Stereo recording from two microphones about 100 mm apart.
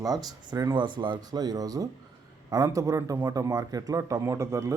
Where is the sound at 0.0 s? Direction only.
40° right (ahead or behind).